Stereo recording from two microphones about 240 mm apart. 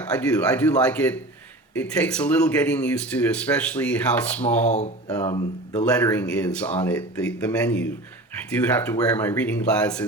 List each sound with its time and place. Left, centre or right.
0.1 s speech: centre
4.7 s speech: left
5.8 s speech: centre